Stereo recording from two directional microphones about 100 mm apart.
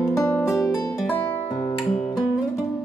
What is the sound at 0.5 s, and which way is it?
Music, 30° left (ahead or behind).